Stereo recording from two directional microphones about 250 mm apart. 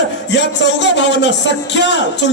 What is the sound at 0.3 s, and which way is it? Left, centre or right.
A man's voice, left.